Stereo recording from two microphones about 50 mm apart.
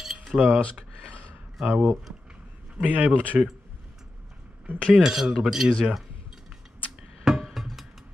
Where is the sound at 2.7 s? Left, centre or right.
Right.